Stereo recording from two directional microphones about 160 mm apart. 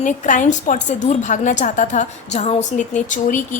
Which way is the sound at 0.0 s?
50° left (ahead or behind).